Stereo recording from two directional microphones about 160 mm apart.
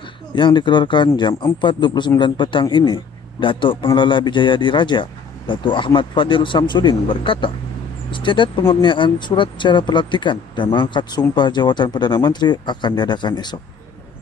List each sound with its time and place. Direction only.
0.4 s speech: 30° left (ahead or behind)